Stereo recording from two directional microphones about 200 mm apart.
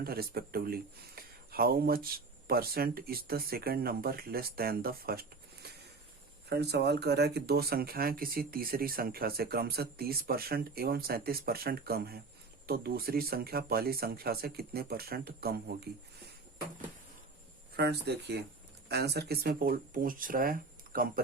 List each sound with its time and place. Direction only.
0.0 s speech: 50° right (ahead or behind)
5.6 s a sound: 50° right (ahead or behind)
6.5 s speech: 55° right (ahead or behind)
17.7 s speech: 55° right (ahead or behind)